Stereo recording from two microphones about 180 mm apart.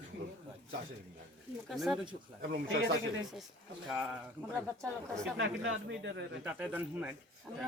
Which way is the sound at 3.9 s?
10° right (ahead or behind).